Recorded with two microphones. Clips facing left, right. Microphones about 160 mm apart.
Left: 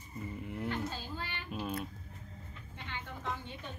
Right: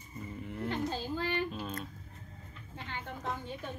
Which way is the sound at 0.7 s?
40° right (ahead or behind).